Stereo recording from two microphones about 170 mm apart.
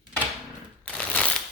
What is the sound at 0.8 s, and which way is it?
Shuffling cards, 10° left (ahead or behind).